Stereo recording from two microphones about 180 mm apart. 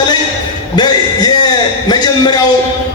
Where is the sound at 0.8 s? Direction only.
25° left (ahead or behind).